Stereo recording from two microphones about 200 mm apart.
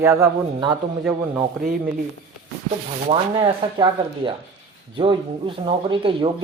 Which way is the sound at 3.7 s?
20° right (ahead or behind).